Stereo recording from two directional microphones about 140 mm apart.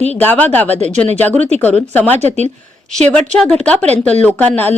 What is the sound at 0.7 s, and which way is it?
Speech, 55° right (ahead or behind).